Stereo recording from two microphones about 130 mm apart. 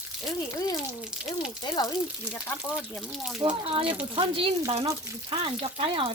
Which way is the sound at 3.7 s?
45° right (ahead or behind).